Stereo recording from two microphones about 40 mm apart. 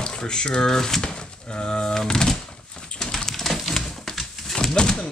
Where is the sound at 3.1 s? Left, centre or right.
Centre.